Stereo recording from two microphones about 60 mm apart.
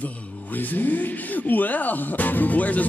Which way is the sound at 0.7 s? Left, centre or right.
Left.